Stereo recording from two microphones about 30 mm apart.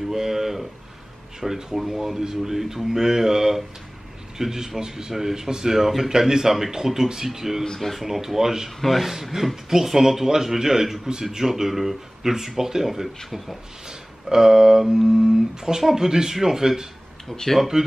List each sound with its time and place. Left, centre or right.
0.1 s a sound: centre
1.4 s speech: centre
8.6 s speech: centre
13.8 s speech: centre
17.3 s speech: centre
17.6 s speech: centre